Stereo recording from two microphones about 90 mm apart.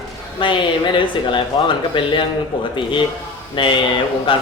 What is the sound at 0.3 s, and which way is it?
Speech, 70° left (ahead or behind).